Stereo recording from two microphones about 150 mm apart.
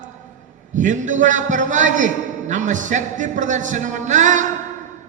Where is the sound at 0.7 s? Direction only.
55° right (ahead or behind).